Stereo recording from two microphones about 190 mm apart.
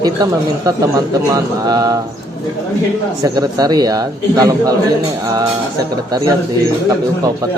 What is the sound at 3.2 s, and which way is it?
Speech, 20° right (ahead or behind).